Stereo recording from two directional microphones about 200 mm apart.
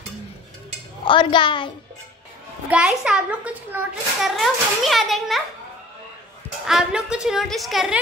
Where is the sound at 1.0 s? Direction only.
25° left (ahead or behind).